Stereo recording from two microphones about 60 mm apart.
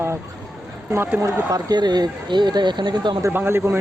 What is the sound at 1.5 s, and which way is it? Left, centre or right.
Speech, right.